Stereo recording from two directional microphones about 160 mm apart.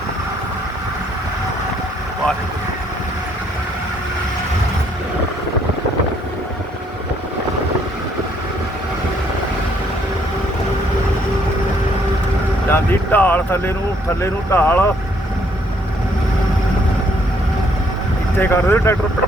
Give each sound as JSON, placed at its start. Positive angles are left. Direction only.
{"t": 12.6, "sound": "a sound", "side_deg": 15}
{"t": 14.2, "sound": "speech", "side_deg": 15}
{"t": 18.3, "sound": "speech", "side_deg": 15}